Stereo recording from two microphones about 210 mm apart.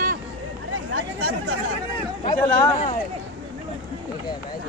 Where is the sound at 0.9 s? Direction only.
90° right.